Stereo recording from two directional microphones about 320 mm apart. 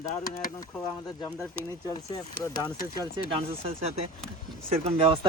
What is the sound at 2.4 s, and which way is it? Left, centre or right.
Speech, centre.